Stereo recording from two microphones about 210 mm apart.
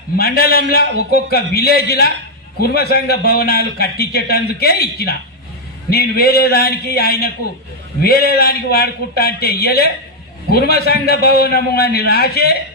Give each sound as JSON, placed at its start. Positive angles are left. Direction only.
{"t": 0.2, "sound": "a man's voice", "side_deg": 45}